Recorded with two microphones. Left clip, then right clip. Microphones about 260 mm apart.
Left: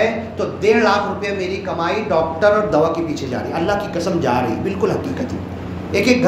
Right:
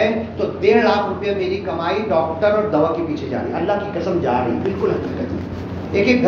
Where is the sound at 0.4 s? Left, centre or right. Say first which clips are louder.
Even; left.